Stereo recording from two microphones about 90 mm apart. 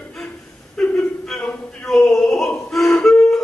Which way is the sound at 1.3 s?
Centre (ahead or behind).